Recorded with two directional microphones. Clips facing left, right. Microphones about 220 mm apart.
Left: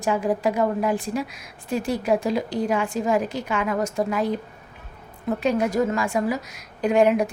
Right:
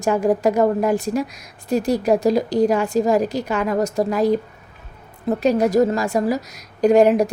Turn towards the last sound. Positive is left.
turn(degrees=-40)  # may be behind; listen again after turning